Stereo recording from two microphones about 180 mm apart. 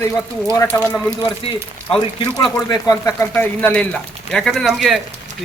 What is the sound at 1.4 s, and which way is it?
Speech, 30° left (ahead or behind).